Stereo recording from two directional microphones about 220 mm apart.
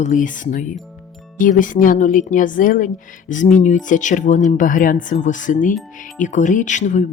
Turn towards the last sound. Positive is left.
turn(degrees=35)  # may be behind; listen again after turning